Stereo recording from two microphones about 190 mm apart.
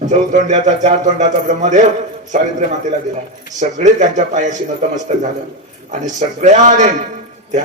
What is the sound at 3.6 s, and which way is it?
Speech, 40° right (ahead or behind).